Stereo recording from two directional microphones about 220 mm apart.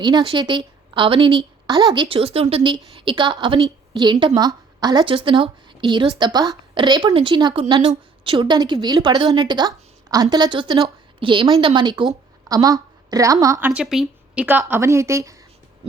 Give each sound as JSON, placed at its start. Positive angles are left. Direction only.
{"t": 0.0, "sound": "a woman's voice", "side_deg": -20}